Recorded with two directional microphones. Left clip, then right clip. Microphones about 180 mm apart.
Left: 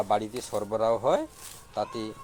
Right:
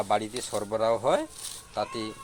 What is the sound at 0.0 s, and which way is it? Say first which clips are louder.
Speech: even; centre (ahead or behind).